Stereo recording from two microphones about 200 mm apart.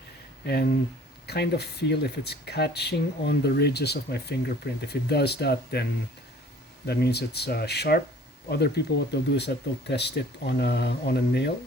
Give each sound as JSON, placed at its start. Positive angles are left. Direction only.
{"t": 0.4, "sound": "speech", "side_deg": 55}